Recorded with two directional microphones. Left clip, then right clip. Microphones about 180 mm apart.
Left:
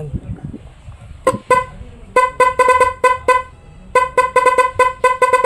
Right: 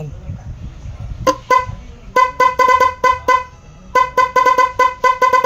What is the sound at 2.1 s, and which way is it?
Music, 25° left (ahead or behind).